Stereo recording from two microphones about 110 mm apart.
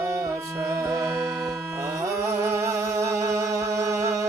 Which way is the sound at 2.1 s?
25° right (ahead or behind).